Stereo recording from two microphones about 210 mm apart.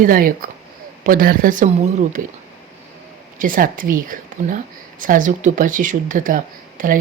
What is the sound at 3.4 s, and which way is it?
Speech, 40° right (ahead or behind).